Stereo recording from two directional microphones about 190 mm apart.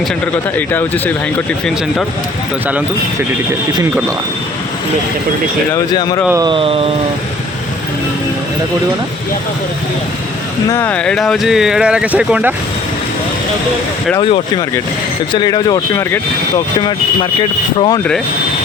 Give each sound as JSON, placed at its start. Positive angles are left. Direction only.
{"t": 0.5, "sound": "speech", "side_deg": 10}
{"t": 5.9, "sound": "speech", "side_deg": 20}
{"t": 6.2, "sound": "speech", "side_deg": -15}
{"t": 6.5, "sound": "speech", "side_deg": -30}
{"t": 10.7, "sound": "speech", "side_deg": 10}
{"t": 14.2, "sound": "speech", "side_deg": 25}
{"t": 17.7, "sound": "speech", "side_deg": 25}